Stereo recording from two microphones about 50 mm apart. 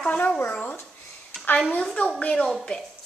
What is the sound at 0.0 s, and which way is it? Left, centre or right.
Speech, left.